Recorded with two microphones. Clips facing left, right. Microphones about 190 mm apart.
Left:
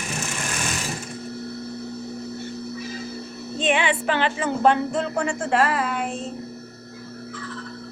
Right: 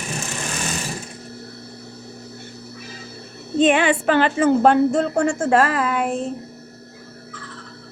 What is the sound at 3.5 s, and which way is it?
Speech, 50° right (ahead or behind).